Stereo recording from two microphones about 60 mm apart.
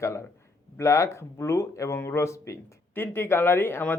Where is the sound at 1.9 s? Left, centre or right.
Left.